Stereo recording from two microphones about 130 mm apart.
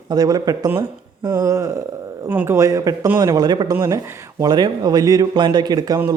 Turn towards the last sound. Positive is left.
turn(degrees=-30)  # may be behind; listen again after turning